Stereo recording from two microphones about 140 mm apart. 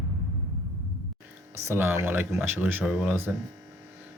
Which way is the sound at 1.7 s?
15° right (ahead or behind).